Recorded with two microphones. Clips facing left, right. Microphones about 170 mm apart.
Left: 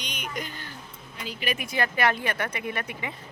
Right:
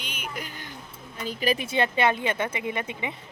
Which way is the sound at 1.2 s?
40° right (ahead or behind).